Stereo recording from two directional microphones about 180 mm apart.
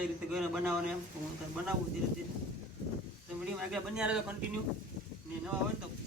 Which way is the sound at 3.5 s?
5° right (ahead or behind).